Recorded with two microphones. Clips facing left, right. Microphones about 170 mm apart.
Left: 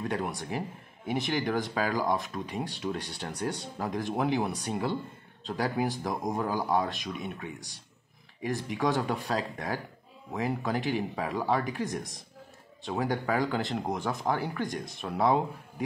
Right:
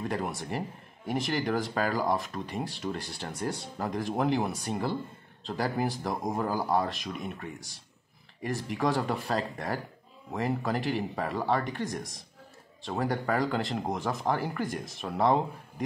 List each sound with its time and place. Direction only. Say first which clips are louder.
0.0 s a man's voice: even; centre (ahead or behind)